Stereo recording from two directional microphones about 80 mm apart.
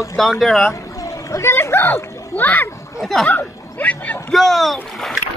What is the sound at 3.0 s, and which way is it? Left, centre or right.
Speech, centre.